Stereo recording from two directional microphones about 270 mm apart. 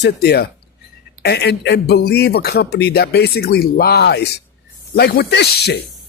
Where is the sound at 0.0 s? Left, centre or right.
Left.